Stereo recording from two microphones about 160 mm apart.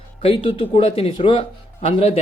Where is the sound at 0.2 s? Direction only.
35° left (ahead or behind).